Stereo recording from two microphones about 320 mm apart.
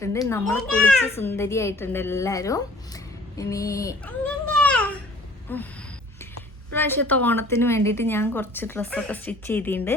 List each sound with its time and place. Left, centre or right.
0.0 s a child's voice: centre
4.6 s a sound: centre
6.7 s a child's voice: centre